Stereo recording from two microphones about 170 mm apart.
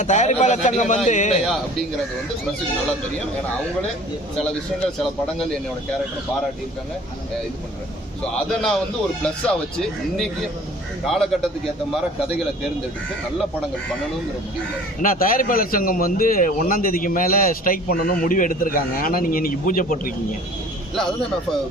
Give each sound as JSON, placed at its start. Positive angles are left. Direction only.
{"t": 0.0, "sound": "a man's voice", "side_deg": 45}
{"t": 8.4, "sound": "speech", "side_deg": 5}
{"t": 15.0, "sound": "a man's voice", "side_deg": 55}